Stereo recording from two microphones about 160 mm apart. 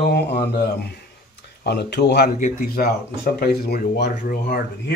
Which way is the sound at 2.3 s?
60° left (ahead or behind).